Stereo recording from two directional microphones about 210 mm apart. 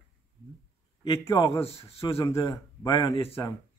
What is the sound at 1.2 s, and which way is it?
A man's voice, 20° left (ahead or behind).